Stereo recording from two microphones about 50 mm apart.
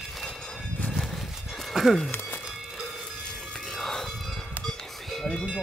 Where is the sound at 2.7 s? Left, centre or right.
Centre.